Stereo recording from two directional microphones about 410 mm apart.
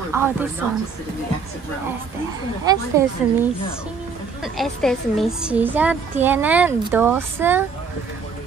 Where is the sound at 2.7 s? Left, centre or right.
Centre.